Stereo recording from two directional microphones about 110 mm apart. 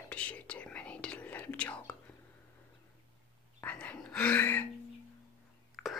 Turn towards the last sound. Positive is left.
turn(degrees=5)  # may be behind; listen again after turning